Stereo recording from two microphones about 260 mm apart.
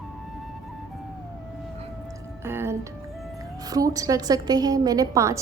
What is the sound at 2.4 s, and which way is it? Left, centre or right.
Music, centre.